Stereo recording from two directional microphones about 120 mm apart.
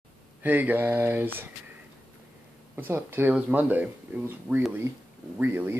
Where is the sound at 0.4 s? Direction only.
15° right (ahead or behind).